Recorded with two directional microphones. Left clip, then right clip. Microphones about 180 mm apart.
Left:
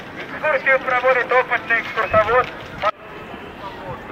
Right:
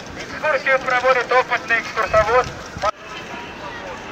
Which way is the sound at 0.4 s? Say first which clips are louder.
Left 1 dB; centre (ahead or behind).